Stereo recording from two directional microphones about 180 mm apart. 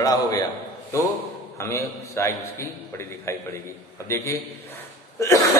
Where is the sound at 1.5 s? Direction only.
15° left (ahead or behind).